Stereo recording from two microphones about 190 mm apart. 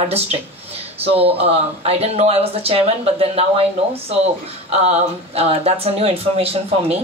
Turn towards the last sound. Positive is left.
turn(degrees=-30)  # may be behind; listen again after turning